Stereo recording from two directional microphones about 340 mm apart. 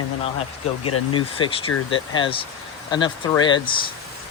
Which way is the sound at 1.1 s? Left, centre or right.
Centre.